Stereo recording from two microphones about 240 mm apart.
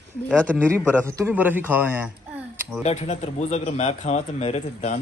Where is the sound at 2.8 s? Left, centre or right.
Left.